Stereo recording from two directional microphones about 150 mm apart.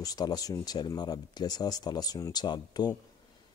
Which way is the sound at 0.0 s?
25° left (ahead or behind).